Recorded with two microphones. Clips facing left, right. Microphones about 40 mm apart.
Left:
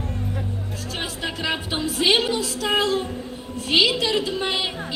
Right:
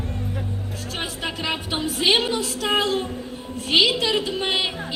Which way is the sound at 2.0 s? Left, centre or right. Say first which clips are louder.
Left 1 dB; right.